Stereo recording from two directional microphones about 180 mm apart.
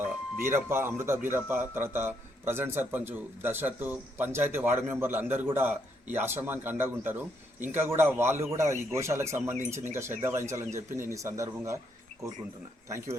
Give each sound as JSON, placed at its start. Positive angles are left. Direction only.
{"t": 0.0, "sound": "speech", "side_deg": -15}